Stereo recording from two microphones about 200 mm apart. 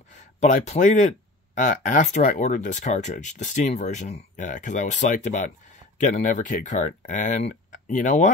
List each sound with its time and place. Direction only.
0.4 s speech: 40° left (ahead or behind)